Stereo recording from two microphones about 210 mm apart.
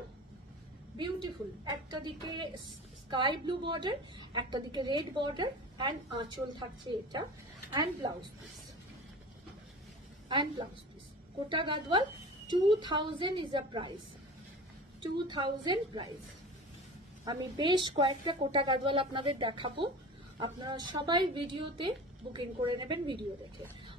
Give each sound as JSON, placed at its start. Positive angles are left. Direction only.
{"t": 0.9, "sound": "a woman's voice", "side_deg": -20}
{"t": 10.2, "sound": "a woman's voice", "side_deg": -20}
{"t": 15.0, "sound": "a woman's voice", "side_deg": -20}
{"t": 17.2, "sound": "a woman's voice", "side_deg": -20}